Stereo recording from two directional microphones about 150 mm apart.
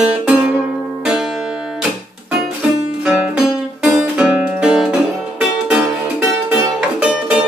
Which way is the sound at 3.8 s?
5° right (ahead or behind).